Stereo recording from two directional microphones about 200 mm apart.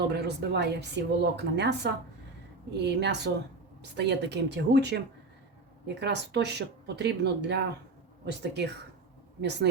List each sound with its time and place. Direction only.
0.1 s speech: 55° right (ahead or behind)